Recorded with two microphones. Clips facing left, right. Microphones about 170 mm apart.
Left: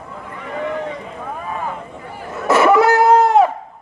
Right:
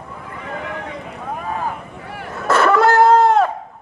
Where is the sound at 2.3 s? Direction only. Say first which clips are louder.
Left 3 dB; 15° left (ahead or behind).